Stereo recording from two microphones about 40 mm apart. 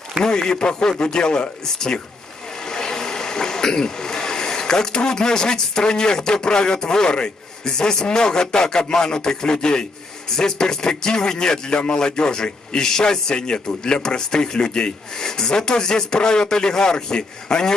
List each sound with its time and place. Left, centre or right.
0.2 s speech: centre